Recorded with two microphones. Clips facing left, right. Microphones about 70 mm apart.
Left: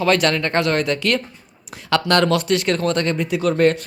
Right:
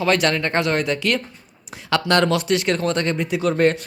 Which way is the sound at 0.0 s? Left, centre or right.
Centre.